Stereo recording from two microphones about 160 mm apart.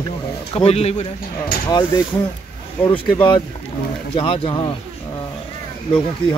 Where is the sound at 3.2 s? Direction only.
30° left (ahead or behind).